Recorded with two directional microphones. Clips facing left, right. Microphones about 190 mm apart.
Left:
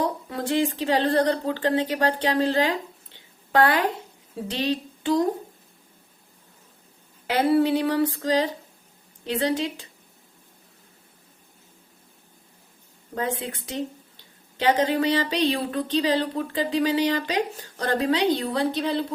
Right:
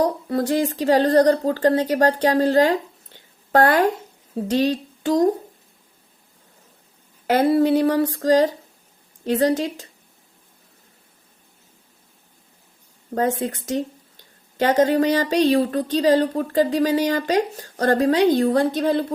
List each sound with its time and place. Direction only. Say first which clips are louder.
0.0 s a woman's voice: right 6 dB; 40° right (ahead or behind)
7.3 s a woman's voice: right 3 dB; 45° right (ahead or behind)
13.1 s a woman's voice: right 7 dB; 45° right (ahead or behind)